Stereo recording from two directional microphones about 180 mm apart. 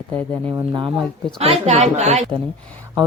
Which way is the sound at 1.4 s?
35° right (ahead or behind).